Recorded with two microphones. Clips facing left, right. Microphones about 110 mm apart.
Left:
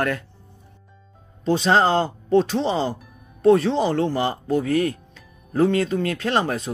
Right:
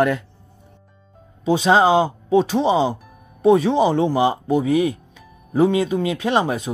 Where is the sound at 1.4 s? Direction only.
10° right (ahead or behind).